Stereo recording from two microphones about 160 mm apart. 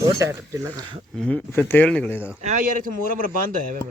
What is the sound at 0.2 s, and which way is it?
Speech, 20° right (ahead or behind).